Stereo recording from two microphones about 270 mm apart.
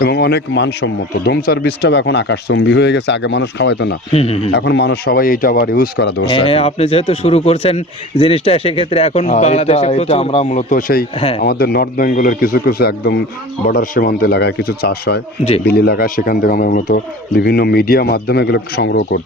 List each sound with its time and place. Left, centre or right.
0.0 s speech: left
4.1 s speech: left
4.5 s speech: left
6.2 s speech: left
11.4 s speech: left